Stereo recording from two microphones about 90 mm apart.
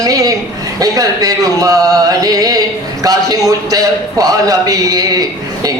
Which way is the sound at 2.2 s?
45° right (ahead or behind).